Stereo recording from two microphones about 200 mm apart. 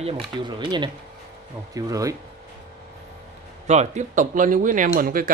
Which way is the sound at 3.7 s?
35° right (ahead or behind).